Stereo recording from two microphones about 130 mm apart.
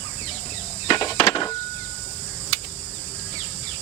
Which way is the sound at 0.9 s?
35° left (ahead or behind).